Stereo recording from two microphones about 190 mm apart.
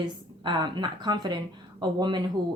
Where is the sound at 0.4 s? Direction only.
25° right (ahead or behind).